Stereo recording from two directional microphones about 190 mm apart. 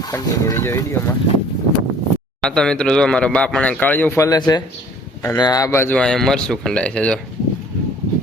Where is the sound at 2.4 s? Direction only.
5° left (ahead or behind).